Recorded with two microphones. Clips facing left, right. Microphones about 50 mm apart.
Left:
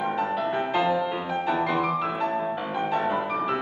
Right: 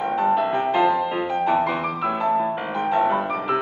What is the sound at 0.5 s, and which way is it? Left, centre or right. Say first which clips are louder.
Music: right 5 dB; centre.